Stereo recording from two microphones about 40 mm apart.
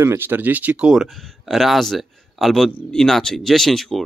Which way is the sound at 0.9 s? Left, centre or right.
Centre.